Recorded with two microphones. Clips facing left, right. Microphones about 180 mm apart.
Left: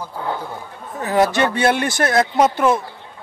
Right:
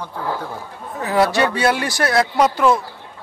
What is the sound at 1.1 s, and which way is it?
A man's voice, 20° left (ahead or behind).